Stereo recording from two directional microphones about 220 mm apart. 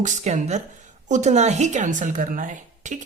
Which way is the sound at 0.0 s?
35° right (ahead or behind).